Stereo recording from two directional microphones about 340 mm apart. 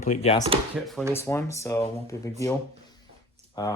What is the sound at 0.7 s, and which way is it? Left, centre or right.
Speech, centre.